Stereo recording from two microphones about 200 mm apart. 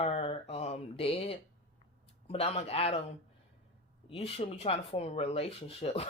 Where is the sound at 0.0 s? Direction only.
30° left (ahead or behind).